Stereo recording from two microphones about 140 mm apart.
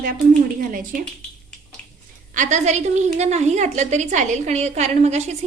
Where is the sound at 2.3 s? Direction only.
60° right (ahead or behind).